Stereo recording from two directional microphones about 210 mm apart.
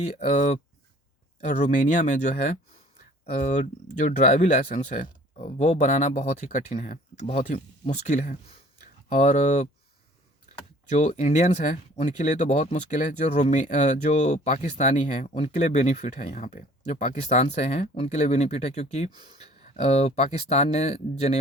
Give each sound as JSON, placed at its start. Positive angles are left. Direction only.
{"t": 0.3, "sound": "speech", "side_deg": 35}
{"t": 10.9, "sound": "speech", "side_deg": 35}